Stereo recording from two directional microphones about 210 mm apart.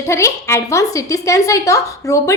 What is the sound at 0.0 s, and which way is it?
Speech, 15° left (ahead or behind).